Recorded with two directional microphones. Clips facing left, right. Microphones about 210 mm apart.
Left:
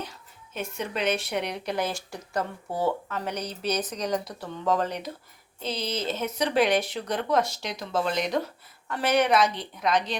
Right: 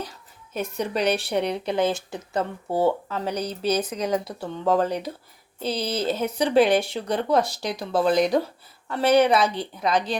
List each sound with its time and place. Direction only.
0.5 s speech: 40° right (ahead or behind)